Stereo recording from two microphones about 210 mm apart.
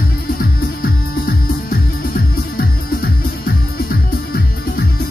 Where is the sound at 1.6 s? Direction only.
45° left (ahead or behind).